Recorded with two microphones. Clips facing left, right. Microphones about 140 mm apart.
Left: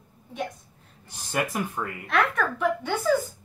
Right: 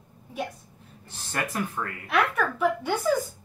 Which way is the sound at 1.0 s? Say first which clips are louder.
Left 3 dB; 15° left (ahead or behind).